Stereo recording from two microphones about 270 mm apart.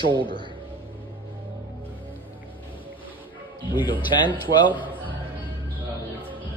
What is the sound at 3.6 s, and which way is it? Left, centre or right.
Speech, centre.